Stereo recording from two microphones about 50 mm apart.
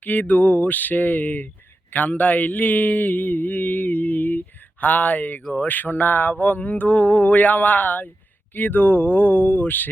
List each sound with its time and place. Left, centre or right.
0.0 s mantra: left